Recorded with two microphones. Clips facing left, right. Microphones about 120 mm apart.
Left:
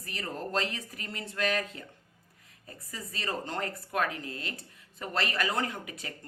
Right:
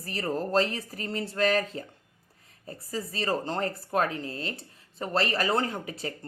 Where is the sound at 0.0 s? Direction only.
35° right (ahead or behind).